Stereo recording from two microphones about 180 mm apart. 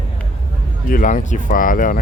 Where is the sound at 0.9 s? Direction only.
50° left (ahead or behind).